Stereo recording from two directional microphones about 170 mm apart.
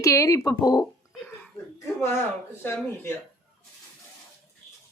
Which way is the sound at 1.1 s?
10° left (ahead or behind).